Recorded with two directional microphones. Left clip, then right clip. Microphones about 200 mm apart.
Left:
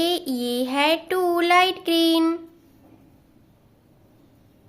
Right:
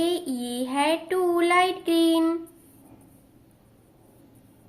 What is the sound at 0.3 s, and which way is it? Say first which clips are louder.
Child singing: left 5 dB; 25° left (ahead or behind).